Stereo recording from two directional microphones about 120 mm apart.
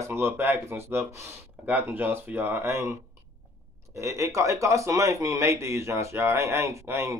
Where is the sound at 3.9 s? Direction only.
25° right (ahead or behind).